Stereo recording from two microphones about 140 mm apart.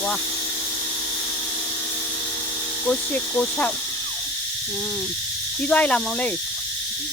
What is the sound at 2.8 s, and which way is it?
Cricket, 10° left (ahead or behind).